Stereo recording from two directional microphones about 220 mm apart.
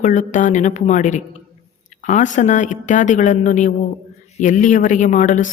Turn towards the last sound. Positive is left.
turn(degrees=35)  # may be behind; listen again after turning